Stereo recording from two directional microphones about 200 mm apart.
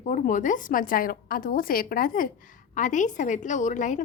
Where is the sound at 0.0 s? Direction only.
40° left (ahead or behind).